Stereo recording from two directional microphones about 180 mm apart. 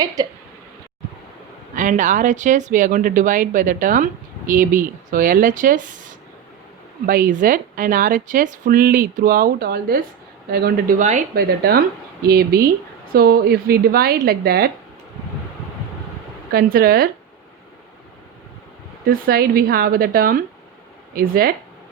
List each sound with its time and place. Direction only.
1.7 s speech: 45° right (ahead or behind)
11.3 s a woman's voice: 60° right (ahead or behind)
16.5 s a woman's voice: 55° right (ahead or behind)
19.0 s a woman's voice: 55° right (ahead or behind)